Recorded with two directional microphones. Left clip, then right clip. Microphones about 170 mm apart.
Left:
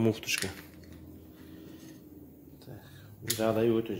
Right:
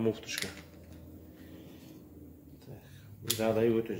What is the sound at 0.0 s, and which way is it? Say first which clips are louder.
Speech: left 4 dB; 40° left (ahead or behind).